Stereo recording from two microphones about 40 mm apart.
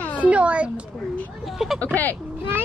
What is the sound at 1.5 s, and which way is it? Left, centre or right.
Speech, centre.